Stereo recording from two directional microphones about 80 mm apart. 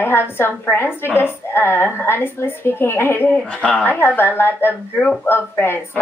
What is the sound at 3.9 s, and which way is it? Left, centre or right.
A woman's voice, left.